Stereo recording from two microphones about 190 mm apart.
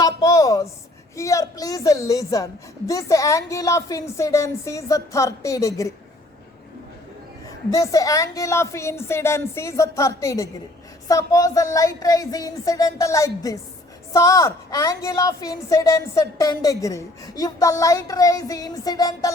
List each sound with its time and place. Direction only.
0.0 s a sound: 20° left (ahead or behind)
1.1 s a woman's voice: 15° left (ahead or behind)
7.7 s a woman's voice: 15° left (ahead or behind)